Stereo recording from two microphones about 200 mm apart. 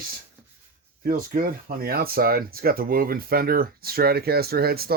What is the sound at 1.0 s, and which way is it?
Speech, 45° right (ahead or behind).